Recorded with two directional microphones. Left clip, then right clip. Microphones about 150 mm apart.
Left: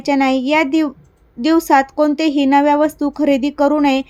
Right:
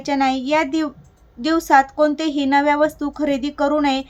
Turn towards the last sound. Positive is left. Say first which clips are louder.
# left 4 dB
turn(degrees=35)  # may be behind; listen again after turning